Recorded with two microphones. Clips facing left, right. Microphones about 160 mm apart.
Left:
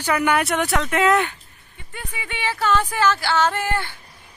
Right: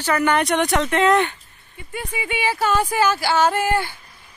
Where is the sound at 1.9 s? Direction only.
10° right (ahead or behind).